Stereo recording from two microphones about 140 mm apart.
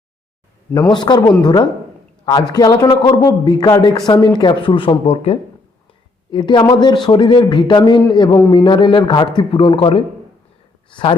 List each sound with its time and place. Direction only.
0.7 s speech: 30° left (ahead or behind)